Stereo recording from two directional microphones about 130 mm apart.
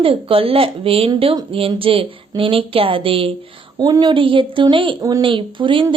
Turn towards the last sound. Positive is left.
turn(degrees=-40)  # may be behind; listen again after turning